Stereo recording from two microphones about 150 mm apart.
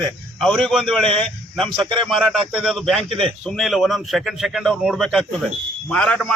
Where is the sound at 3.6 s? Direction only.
Centre (ahead or behind).